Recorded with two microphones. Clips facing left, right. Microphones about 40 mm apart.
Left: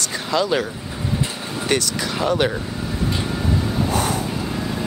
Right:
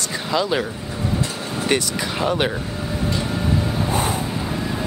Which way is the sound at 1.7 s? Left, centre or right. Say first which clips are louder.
Even; centre.